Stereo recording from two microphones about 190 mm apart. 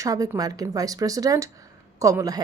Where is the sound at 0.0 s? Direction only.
20° right (ahead or behind).